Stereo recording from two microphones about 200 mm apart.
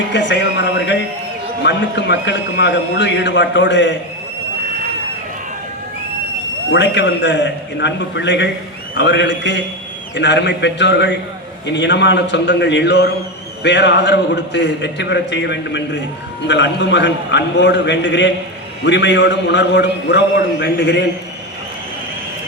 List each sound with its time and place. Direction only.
0.1 s music: 60° left (ahead or behind)
1.6 s a man's voice: 60° left (ahead or behind)
6.7 s a man's voice: 60° left (ahead or behind)